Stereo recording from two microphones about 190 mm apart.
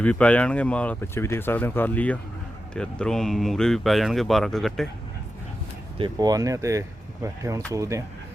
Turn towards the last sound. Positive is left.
turn(degrees=-15)  # may be behind; listen again after turning